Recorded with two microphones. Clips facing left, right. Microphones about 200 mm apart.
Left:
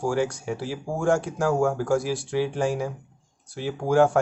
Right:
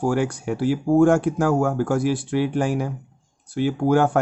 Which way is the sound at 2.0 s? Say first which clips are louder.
Right 4 dB; 60° right (ahead or behind).